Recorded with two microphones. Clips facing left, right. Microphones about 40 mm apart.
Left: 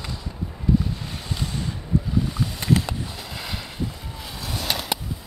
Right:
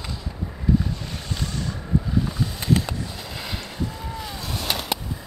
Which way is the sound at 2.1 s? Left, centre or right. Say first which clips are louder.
Even; centre.